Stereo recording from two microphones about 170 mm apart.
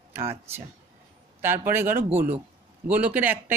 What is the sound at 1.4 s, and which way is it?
Speech, 15° right (ahead or behind).